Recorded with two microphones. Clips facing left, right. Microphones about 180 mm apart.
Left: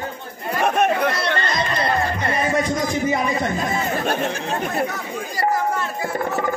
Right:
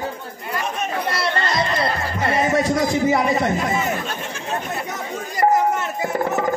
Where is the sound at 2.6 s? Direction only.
20° left (ahead or behind).